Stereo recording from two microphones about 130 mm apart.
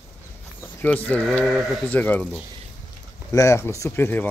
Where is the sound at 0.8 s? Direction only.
10° left (ahead or behind).